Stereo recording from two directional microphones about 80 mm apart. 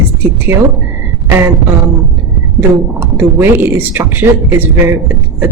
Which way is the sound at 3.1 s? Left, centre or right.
Right.